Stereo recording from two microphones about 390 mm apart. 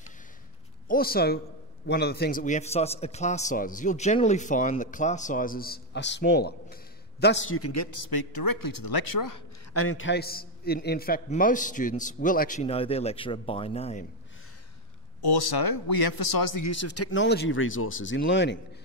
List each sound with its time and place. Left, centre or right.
0.8 s a man's voice: left
8.1 s speech: left
9.8 s a man's voice: left; by 14.0 s centre
15.2 s speech: left